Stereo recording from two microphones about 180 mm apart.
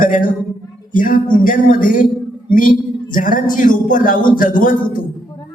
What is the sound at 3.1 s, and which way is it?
Speech, 50° left (ahead or behind).